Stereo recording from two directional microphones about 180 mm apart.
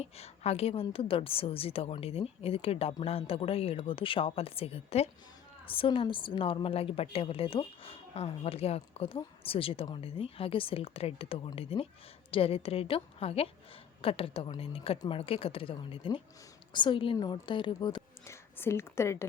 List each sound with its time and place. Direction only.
0.0 s a woman's voice: 35° left (ahead or behind); by 19.2 s 15° left (ahead or behind)